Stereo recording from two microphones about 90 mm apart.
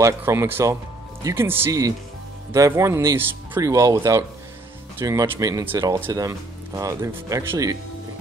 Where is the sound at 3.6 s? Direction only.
40° right (ahead or behind).